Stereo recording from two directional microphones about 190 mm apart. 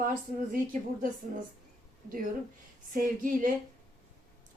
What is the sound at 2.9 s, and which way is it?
Speech, 45° right (ahead or behind).